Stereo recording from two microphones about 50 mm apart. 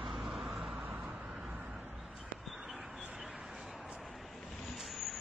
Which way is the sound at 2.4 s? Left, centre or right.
Centre.